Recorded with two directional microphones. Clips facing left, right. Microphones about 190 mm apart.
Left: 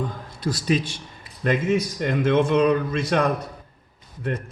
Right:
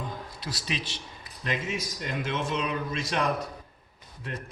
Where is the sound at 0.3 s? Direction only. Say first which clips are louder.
Left 15 dB; 50° left (ahead or behind).